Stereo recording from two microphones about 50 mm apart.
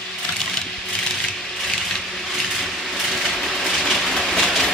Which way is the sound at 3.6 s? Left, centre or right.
Centre.